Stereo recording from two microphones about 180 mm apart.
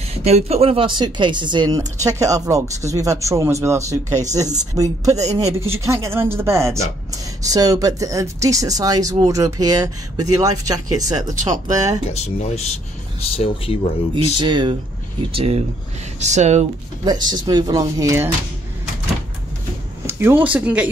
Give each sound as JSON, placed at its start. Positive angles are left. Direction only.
{"t": 0.2, "sound": "a man's voice", "side_deg": -35}
{"t": 12.1, "sound": "speech", "side_deg": 35}
{"t": 14.4, "sound": "speech", "side_deg": -25}
{"t": 17.0, "sound": "speech", "side_deg": -25}
{"t": 20.1, "sound": "a man's voice", "side_deg": -15}